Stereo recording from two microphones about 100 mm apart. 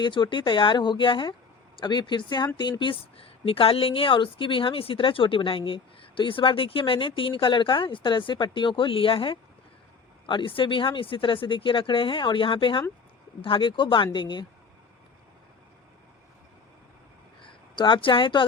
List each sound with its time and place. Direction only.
0.0 s speech: 50° left (ahead or behind)
17.4 s speech: 50° left (ahead or behind)